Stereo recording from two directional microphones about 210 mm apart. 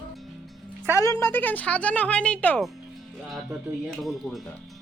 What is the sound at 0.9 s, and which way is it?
Speech, 15° left (ahead or behind).